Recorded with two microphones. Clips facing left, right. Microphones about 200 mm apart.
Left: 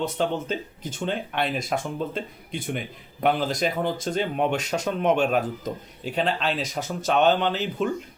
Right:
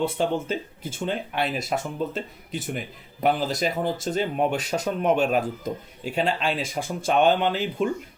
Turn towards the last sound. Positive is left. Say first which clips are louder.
# right 1 dB
turn(degrees=-10)  # may be behind; listen again after turning